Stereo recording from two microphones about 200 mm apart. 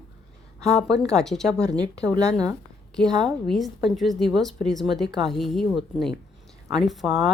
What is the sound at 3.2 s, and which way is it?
A woman's voice, centre (ahead or behind).